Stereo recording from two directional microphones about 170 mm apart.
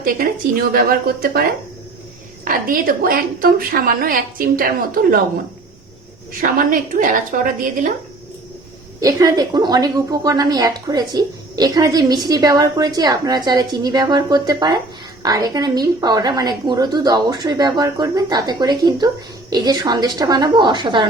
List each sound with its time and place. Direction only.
0.7 s a woman's voice: 60° right (ahead or behind)
6.4 s a woman's voice: 55° right (ahead or behind)
9.0 s a woman's voice: 20° right (ahead or behind)